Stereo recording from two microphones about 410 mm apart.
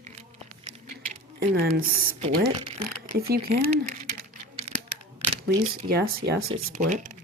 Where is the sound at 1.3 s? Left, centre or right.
Right.